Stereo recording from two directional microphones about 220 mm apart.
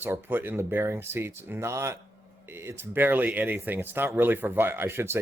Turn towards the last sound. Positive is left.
turn(degrees=-10)  # may be behind; listen again after turning